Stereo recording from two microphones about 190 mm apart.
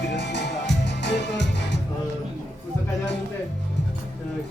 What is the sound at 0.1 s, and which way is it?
Music, 65° left (ahead or behind).